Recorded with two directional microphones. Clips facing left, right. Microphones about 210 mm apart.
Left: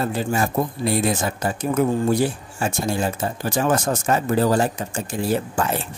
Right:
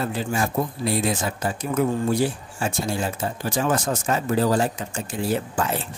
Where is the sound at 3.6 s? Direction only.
50° left (ahead or behind).